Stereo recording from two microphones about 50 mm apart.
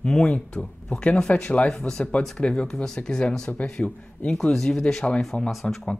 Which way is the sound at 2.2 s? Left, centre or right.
Centre.